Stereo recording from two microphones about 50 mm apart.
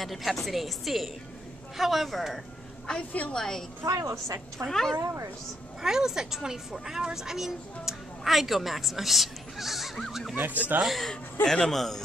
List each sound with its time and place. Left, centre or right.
0.0 s a woman's voice: centre
3.1 s a woman's voice: left
3.3 s a man's voice: centre
3.8 s a woman's voice: right
4.6 s a man's voice: centre
4.9 s a woman's voice: right
5.8 s a woman's voice: centre
10.3 s speech: right
11.4 s a man's voice: centre